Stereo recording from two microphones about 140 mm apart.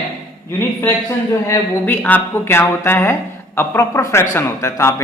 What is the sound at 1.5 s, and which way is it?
Speech, 15° left (ahead or behind).